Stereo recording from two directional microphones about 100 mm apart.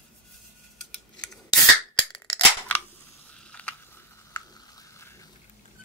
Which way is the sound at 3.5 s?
10° left (ahead or behind).